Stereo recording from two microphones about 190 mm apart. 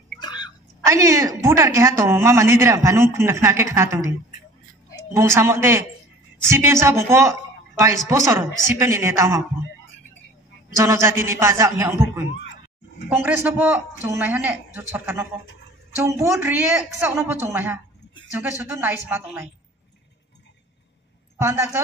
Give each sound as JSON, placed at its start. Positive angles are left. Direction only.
{"t": 0.2, "sound": "a sound", "side_deg": 20}
{"t": 0.8, "sound": "a woman's voice", "side_deg": -15}
{"t": 5.1, "sound": "a woman's voice", "side_deg": -15}
{"t": 10.8, "sound": "a woman's voice", "side_deg": -15}